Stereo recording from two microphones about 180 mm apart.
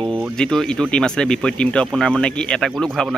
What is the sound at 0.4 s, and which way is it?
Speech, 5° left (ahead or behind).